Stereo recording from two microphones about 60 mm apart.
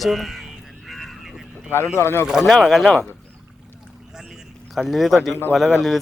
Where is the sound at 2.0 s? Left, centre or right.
Left.